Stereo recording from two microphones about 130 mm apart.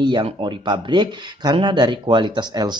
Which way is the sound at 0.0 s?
35° right (ahead or behind).